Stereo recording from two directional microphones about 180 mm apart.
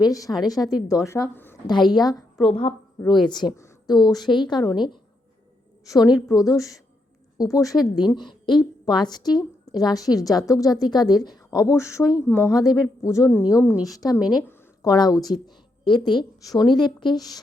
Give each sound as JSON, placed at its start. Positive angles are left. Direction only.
{"t": 0.0, "sound": "a woman's voice", "side_deg": 20}
{"t": 2.5, "sound": "a woman's voice", "side_deg": 35}
{"t": 3.1, "sound": "a woman's voice", "side_deg": 25}